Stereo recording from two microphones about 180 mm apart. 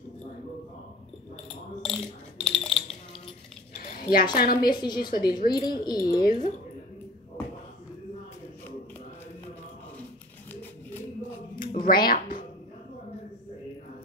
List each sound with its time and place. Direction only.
1.8 s mechanisms: centre (ahead or behind)
3.7 s a sound: 50° left (ahead or behind)
4.6 s a woman's voice: 25° left (ahead or behind)
6.2 s speech: 45° left (ahead or behind)
11.6 s a sound: 50° left (ahead or behind)
12.1 s music: 50° left (ahead or behind)